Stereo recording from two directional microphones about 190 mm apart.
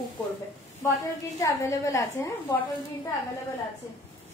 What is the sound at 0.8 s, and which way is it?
A woman's voice, 15° left (ahead or behind).